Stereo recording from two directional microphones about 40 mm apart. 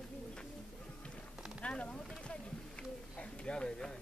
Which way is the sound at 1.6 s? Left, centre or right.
Left.